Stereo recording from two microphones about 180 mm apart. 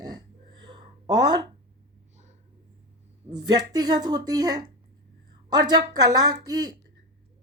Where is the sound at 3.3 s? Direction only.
20° right (ahead or behind).